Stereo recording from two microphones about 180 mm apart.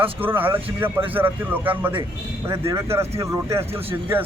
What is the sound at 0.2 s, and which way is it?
Speech, 10° right (ahead or behind).